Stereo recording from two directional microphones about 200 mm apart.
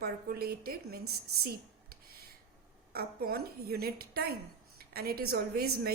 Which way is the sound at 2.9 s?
50° right (ahead or behind).